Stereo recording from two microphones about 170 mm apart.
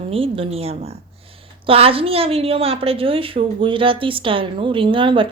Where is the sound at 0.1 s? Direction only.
35° right (ahead or behind).